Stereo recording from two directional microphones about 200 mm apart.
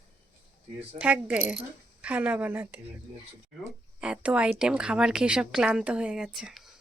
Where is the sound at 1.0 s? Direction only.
5° right (ahead or behind).